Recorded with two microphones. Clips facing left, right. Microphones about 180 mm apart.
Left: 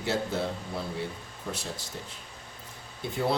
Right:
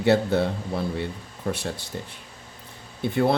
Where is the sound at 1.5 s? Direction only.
60° right (ahead or behind).